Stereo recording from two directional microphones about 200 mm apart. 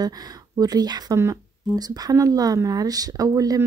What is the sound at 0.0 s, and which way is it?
Speech, 20° right (ahead or behind).